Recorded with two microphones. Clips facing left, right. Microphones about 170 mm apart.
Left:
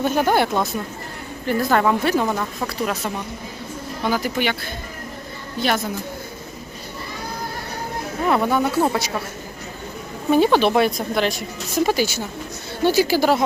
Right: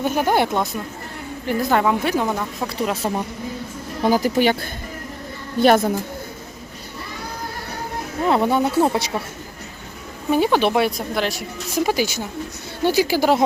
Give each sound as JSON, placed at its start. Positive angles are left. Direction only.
{"t": 0.0, "sound": "speech", "side_deg": -10}
{"t": 4.0, "sound": "speech", "side_deg": -40}
{"t": 5.5, "sound": "a woman's voice", "side_deg": -50}
{"t": 8.3, "sound": "speech", "side_deg": -25}
{"t": 10.3, "sound": "speech", "side_deg": -10}